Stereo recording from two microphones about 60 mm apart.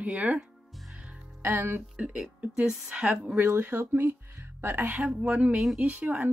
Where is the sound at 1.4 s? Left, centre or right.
Right.